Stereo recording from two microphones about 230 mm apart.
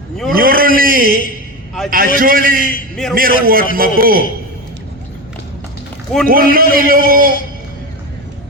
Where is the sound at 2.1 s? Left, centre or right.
Right.